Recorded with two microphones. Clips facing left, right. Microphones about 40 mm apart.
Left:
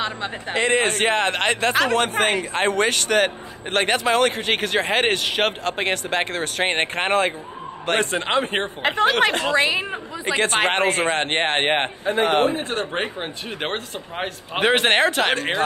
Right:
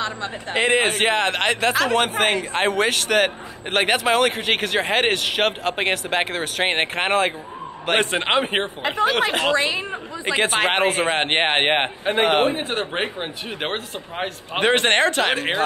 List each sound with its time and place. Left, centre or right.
0.0 s a man's voice: left
0.6 s speech: centre
7.9 s a man's voice: right
8.8 s speech: left
9.6 s speech: centre
10.2 s a man's voice: centre
11.2 s a man's voice: right; by 15.3 s centre
15.3 s a man's voice: centre